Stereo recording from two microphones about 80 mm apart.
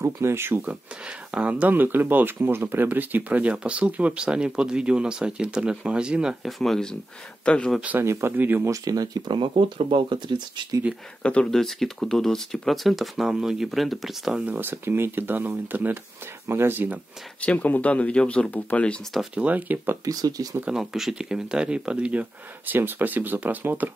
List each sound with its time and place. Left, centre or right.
0.0 s speech: right
0.7 s speech: centre
6.6 s speech: centre
8.0 s speech: right
8.6 s speech: right
11.5 s speech: centre
14.4 s speech: right
17.4 s speech: centre
19.3 s speech: centre
20.1 s speech: right
20.7 s speech: centre; by 23.9 s right